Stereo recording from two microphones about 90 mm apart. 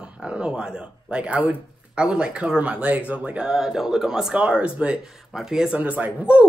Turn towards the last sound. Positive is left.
turn(degrees=-15)  # may be behind; listen again after turning